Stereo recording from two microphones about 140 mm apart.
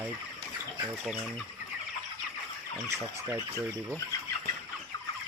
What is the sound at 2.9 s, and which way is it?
Speech, 20° right (ahead or behind).